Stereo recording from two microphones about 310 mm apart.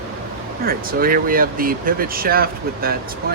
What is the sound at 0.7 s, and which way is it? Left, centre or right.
Speech, right.